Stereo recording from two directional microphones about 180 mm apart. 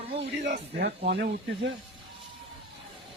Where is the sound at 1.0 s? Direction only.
70° right (ahead or behind).